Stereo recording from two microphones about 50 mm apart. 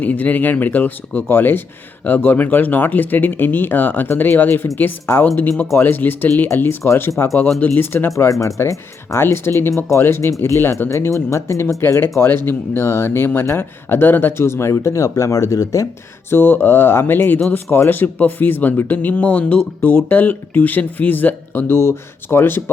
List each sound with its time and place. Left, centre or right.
0.0 s speech: left
8.1 s speech: left
9.2 s speech: left
10.1 s speech: left
11.1 s speech: left
12.3 s speech: left
14.4 s speech: left
16.3 s speech: left
21.7 s speech: left